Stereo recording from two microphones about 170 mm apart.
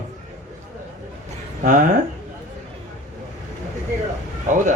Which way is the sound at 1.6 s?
45° right (ahead or behind).